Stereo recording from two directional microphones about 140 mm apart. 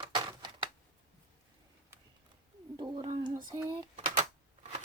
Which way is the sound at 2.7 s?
30° right (ahead or behind).